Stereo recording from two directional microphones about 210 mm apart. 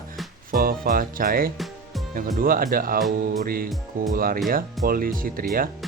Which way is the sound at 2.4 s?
45° right (ahead or behind).